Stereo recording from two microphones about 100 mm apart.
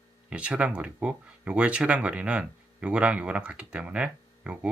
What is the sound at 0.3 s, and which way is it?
Speech, 10° right (ahead or behind).